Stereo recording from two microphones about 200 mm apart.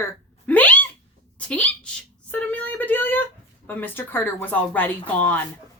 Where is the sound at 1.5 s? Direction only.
5° left (ahead or behind).